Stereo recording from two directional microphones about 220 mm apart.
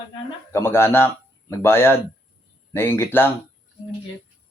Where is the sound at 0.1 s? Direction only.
10° left (ahead or behind).